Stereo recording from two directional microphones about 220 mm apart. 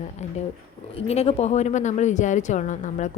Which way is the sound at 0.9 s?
30° left (ahead or behind).